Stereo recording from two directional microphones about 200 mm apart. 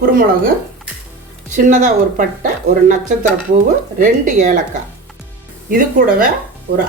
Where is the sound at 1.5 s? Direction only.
40° right (ahead or behind).